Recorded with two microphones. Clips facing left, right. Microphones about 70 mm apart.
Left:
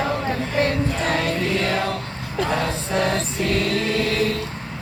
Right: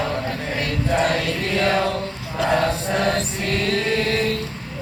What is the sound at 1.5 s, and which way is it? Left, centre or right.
Music, right.